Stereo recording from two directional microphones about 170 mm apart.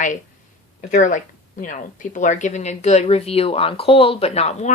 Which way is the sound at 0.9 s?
50° left (ahead or behind).